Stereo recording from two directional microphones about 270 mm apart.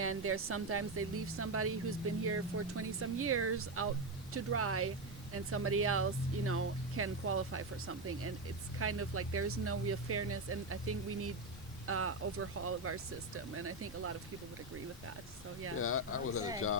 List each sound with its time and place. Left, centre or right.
0.0 s speech: right
15.8 s speech: left